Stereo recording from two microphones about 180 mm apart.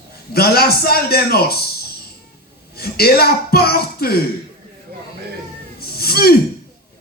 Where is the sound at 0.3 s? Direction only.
60° left (ahead or behind).